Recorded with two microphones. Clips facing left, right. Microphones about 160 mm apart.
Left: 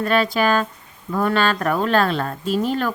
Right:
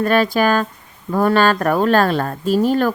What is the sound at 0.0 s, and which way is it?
Speech, 45° right (ahead or behind).